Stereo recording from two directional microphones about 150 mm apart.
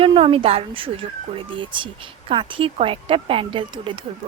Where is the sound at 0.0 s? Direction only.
40° right (ahead or behind).